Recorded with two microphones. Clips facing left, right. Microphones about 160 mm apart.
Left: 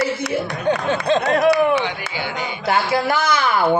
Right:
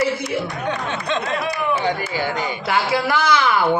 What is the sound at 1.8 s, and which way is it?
Chop, 45° right (ahead or behind).